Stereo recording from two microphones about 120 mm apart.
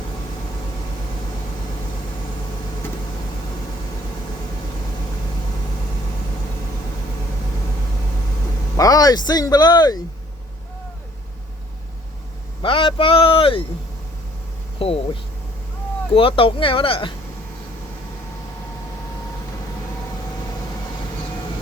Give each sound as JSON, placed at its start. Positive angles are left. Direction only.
{"t": 8.7, "sound": "speech", "side_deg": 30}
{"t": 12.6, "sound": "speech", "side_deg": 45}
{"t": 14.8, "sound": "a sound", "side_deg": 50}
{"t": 16.1, "sound": "speech", "side_deg": 50}